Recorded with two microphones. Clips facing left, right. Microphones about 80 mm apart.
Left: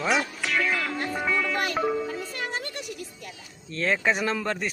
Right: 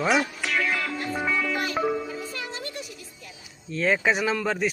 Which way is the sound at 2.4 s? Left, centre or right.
Left.